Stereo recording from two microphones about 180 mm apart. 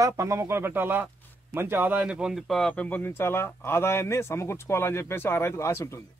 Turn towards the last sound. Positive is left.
turn(degrees=15)  # may be behind; listen again after turning